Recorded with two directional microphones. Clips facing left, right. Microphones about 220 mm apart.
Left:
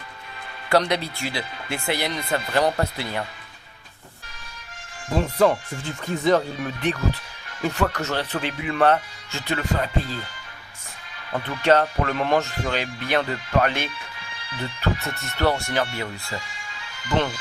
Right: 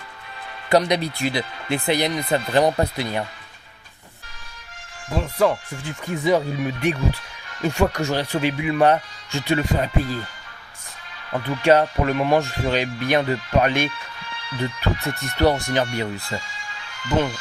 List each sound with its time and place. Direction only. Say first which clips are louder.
0.8 s speech: right 2 dB; 15° right (ahead or behind)
5.1 s speech: left 1 dB; centre (ahead or behind); by 10.2 s 15° right (ahead or behind)
11.4 s speech: right 3 dB; 10° right (ahead or behind)
17.1 s speech: right 2 dB; 10° right (ahead or behind)